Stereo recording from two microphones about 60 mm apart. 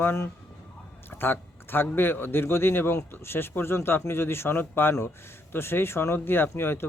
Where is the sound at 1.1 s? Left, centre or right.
Left.